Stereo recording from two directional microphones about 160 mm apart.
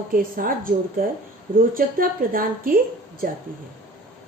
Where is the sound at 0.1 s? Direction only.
60° right (ahead or behind).